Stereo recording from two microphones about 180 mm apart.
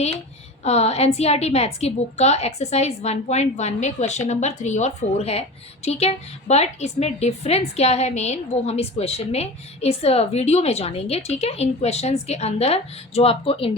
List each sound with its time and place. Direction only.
0.6 s a woman's voice: 35° left (ahead or behind)